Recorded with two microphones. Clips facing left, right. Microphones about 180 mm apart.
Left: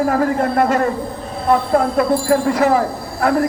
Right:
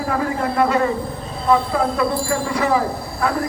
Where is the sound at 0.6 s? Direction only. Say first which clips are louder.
Right 2 dB; 50° left (ahead or behind).